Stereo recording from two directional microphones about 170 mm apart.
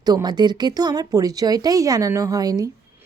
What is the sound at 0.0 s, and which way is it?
A woman's voice, 25° right (ahead or behind).